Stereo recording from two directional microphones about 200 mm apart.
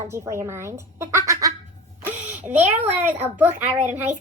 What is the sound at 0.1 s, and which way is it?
A woman's voice, 15° right (ahead or behind).